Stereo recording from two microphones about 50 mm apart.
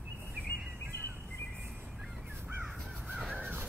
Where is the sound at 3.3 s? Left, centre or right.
Right.